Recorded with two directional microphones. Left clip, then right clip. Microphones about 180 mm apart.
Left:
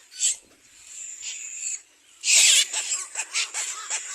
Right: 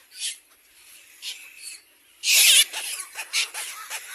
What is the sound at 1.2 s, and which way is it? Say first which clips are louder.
Owl: right 2 dB; 70° right (ahead or behind).